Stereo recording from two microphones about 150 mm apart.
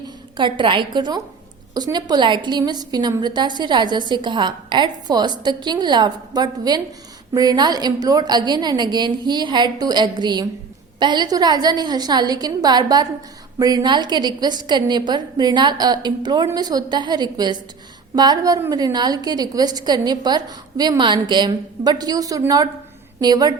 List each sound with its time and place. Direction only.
0.3 s a woman's voice: 30° right (ahead or behind)